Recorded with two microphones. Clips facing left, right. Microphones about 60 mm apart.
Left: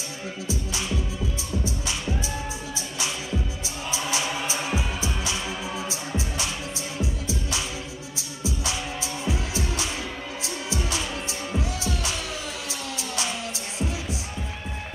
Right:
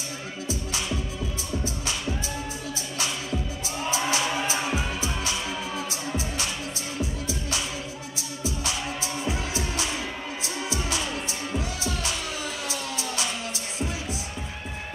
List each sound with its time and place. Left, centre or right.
3.9 s music: right
9.0 s music: right
12.6 s music: right